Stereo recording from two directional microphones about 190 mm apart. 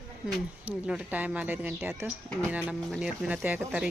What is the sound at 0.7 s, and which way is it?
Speech, 5° right (ahead or behind).